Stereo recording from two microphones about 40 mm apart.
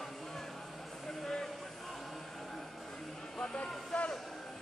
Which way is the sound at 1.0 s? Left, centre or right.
Centre.